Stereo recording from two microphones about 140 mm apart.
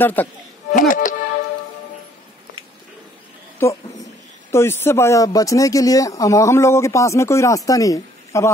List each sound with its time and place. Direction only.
0.0 s speech: 15° left (ahead or behind)
0.7 s speech: 70° left (ahead or behind)
3.6 s speech: 20° left (ahead or behind)